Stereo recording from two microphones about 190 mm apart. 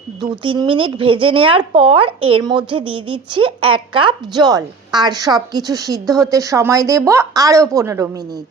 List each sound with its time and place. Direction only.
0.2 s a woman's voice: 20° right (ahead or behind)